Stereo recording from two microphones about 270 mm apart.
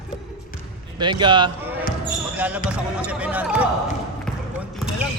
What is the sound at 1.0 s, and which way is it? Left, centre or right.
Speech, centre.